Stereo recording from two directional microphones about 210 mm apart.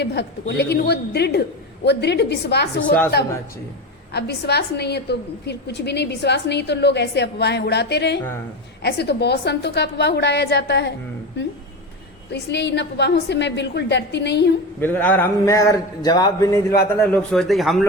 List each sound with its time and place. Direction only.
0.0 s a woman's voice: 55° left (ahead or behind)
4.1 s a woman's voice: 50° left (ahead or behind)
12.3 s a woman's voice: 55° left (ahead or behind)
14.8 s speech: 10° left (ahead or behind)
17.0 s a man's voice: 5° left (ahead or behind)